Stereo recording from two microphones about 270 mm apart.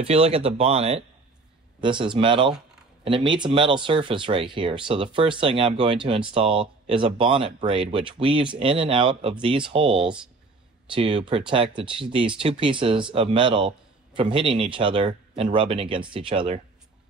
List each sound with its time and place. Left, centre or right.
0.0 s speech: right
10.0 s speech: centre
11.0 s speech: centre